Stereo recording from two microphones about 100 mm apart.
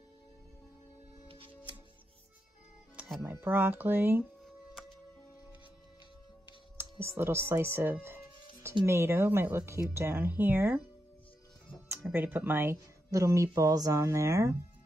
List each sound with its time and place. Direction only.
3.3 s speech: 20° right (ahead or behind)
6.8 s speech: 25° right (ahead or behind)
12.1 s speech: 20° right (ahead or behind)